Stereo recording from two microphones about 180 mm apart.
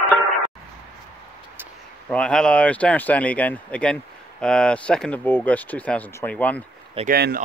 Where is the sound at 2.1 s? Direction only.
5° left (ahead or behind).